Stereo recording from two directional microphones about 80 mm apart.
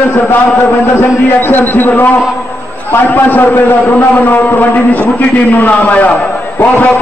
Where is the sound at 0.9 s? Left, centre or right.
Left.